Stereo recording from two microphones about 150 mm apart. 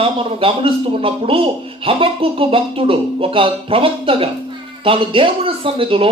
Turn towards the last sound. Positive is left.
turn(degrees=-40)  # may be behind; listen again after turning